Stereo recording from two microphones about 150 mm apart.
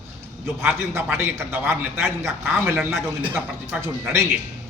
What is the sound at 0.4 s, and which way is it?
A man's voice, 15° right (ahead or behind).